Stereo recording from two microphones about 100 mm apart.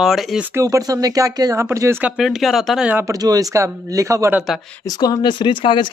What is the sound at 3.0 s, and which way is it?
Speech, 35° right (ahead or behind).